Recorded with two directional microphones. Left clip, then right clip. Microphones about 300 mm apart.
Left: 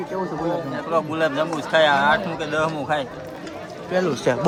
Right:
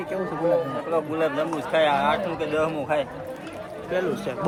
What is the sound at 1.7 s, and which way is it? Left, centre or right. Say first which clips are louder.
Speech: left 5 dB; centre.